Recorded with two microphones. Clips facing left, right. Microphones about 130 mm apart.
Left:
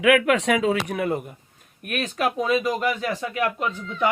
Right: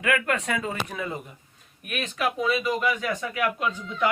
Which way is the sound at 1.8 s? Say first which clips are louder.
Left 3 dB; 45° left (ahead or behind).